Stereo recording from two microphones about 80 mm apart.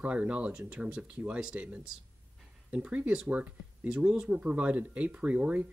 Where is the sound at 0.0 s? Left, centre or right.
Centre.